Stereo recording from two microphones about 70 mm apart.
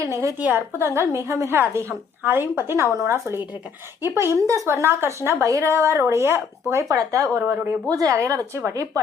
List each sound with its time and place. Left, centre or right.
0.0 s speech: right
0.5 s a woman's voice: right
7.9 s speech: right